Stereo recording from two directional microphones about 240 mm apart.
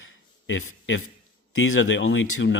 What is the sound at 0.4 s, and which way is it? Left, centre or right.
Speech, left.